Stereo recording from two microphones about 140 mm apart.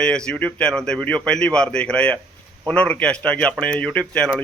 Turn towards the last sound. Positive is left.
turn(degrees=5)  # may be behind; listen again after turning